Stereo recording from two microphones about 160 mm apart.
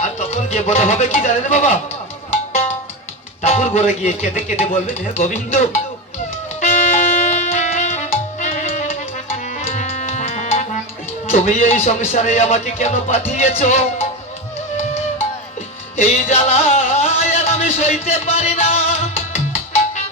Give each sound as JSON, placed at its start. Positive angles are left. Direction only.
{"t": 0.0, "sound": "speech", "side_deg": 45}
{"t": 3.4, "sound": "speech", "side_deg": 45}
{"t": 6.6, "sound": "music", "side_deg": 45}
{"t": 11.3, "sound": "speech", "side_deg": 50}
{"t": 16.0, "sound": "music", "side_deg": 45}